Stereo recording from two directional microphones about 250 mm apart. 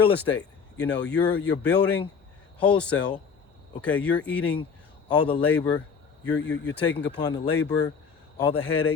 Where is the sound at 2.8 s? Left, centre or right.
Centre.